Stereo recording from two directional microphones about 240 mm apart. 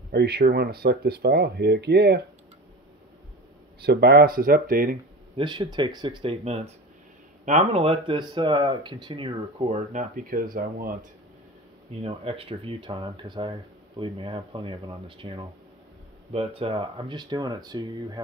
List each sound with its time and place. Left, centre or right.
0.1 s speech: right
3.8 s speech: right
5.3 s speech: centre; by 11.0 s right
12.0 s speech: right